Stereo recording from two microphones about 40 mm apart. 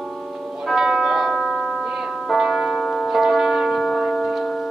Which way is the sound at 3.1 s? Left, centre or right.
Centre.